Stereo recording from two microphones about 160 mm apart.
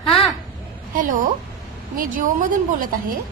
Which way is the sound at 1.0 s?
55° right (ahead or behind).